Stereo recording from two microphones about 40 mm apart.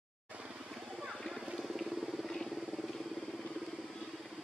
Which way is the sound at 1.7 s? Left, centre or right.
Centre.